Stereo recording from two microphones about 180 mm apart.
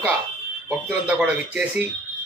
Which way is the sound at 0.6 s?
5° right (ahead or behind).